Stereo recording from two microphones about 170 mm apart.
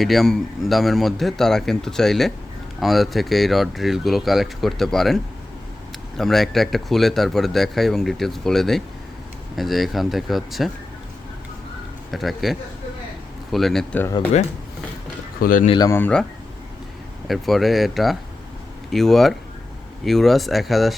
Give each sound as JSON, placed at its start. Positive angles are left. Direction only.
{"t": 0.0, "sound": "speech", "side_deg": 0}
{"t": 12.1, "sound": "speech", "side_deg": 0}
{"t": 15.4, "sound": "speech", "side_deg": 55}
{"t": 15.8, "sound": "speech", "side_deg": 15}
{"t": 17.2, "sound": "speech", "side_deg": 0}